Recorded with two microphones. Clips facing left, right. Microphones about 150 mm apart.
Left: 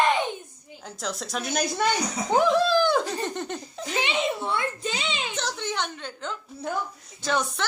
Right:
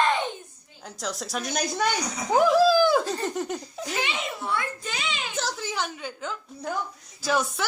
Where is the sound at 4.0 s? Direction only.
25° left (ahead or behind).